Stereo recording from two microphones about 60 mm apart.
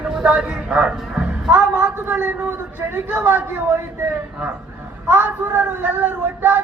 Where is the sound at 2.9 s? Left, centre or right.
Right.